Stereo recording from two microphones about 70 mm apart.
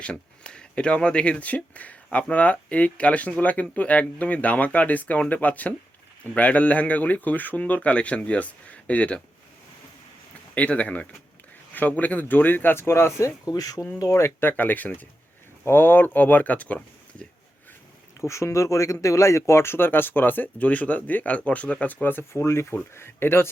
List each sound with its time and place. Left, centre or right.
0.0 s speech: centre
10.5 s speech: left
13.5 s speech: left
14.1 s speech: left
14.5 s speech: left
18.2 s speech: left